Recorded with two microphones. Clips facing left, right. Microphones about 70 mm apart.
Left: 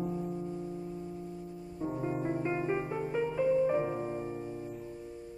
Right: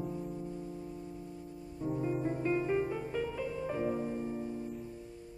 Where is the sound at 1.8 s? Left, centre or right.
Left.